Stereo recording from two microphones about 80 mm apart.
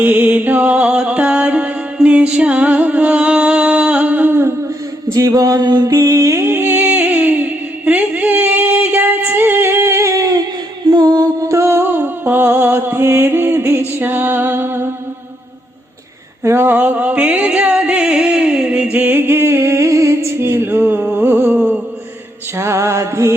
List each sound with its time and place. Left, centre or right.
0.0 s music: right
5.1 s music: right
5.9 s mantra: right
6.4 s music: right
10.8 s music: right
11.4 s music: right
16.4 s music: right
22.5 s music: right